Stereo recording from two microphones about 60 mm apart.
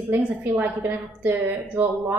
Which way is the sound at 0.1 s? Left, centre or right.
Right.